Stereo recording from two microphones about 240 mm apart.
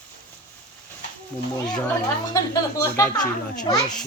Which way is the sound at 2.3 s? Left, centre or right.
Centre.